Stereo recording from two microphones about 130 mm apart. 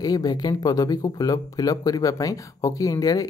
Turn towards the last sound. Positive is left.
turn(degrees=30)  # may be behind; listen again after turning